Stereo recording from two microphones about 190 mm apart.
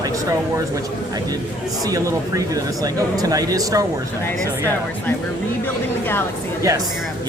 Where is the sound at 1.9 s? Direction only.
15° right (ahead or behind).